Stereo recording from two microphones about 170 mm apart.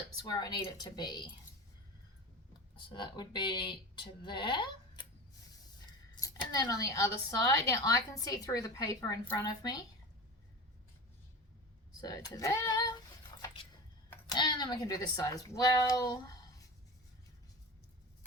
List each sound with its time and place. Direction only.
0.3 s speech: 25° left (ahead or behind)
2.5 s speech: 30° left (ahead or behind)
6.1 s speech: 20° left (ahead or behind)
11.9 s speech: 20° left (ahead or behind)
14.1 s speech: 25° left (ahead or behind)